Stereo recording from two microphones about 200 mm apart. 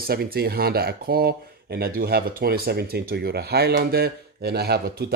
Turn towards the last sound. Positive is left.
turn(degrees=-55)  # may be behind; listen again after turning